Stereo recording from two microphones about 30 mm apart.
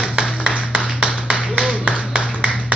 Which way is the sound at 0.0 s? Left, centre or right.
Right.